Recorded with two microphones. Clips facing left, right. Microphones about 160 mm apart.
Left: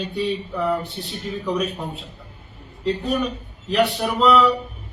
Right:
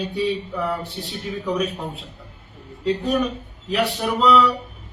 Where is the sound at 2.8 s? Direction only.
Centre (ahead or behind).